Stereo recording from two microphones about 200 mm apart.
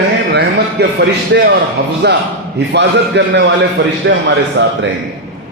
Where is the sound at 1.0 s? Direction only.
55° right (ahead or behind).